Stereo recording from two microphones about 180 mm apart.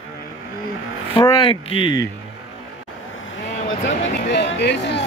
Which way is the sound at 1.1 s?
25° left (ahead or behind).